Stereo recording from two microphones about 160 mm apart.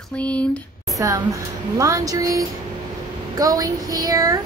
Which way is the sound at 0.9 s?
20° right (ahead or behind).